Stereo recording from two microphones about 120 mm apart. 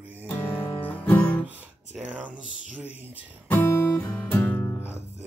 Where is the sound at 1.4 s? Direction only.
15° right (ahead or behind).